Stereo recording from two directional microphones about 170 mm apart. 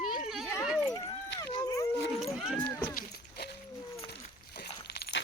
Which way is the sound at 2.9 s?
65° left (ahead or behind).